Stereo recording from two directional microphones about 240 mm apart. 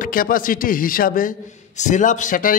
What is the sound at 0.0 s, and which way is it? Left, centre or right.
Speech, left.